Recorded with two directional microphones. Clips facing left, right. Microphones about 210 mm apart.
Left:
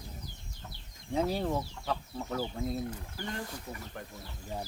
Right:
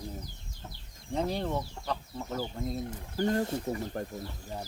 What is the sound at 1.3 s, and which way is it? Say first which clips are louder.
Speech: even; 5° left (ahead or behind).